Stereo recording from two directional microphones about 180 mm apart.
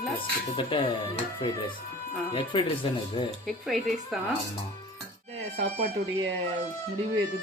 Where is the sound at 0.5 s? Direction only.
30° left (ahead or behind).